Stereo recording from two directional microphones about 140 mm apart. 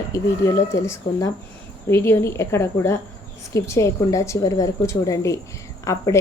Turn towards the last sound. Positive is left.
turn(degrees=20)  # may be behind; listen again after turning